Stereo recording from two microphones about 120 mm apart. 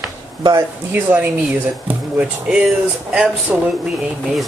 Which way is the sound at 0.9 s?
15° right (ahead or behind).